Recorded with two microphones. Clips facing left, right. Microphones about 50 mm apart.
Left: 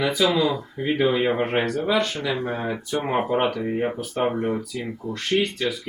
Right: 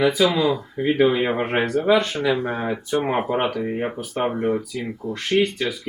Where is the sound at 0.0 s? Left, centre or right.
Centre.